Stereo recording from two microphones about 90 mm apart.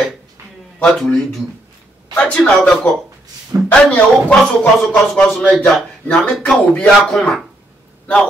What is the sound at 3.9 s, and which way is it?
Speech, 10° left (ahead or behind).